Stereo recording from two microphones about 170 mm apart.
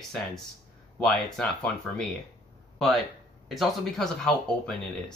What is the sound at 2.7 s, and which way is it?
Speech, centre (ahead or behind).